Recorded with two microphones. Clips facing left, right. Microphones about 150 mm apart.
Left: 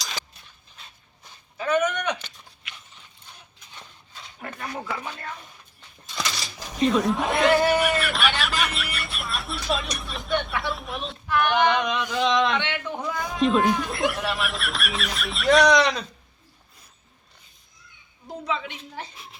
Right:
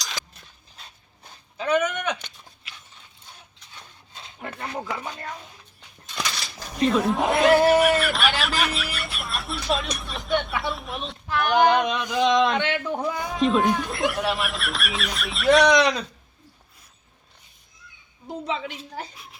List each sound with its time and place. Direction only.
1.5 s a sound: 15° right (ahead or behind)
4.1 s a sound: 25° right (ahead or behind)
4.8 s chopping: 15° right (ahead or behind)
6.7 s speech: centre (ahead or behind)
11.3 s female singing: 35° right (ahead or behind)
11.9 s chopping: 15° right (ahead or behind)
12.5 s a woman's voice: 45° right (ahead or behind)
13.3 s speech: centre (ahead or behind)
15.7 s chopping: 10° right (ahead or behind)
18.4 s a woman's voice: 30° right (ahead or behind)
19.1 s a child's voice: centre (ahead or behind)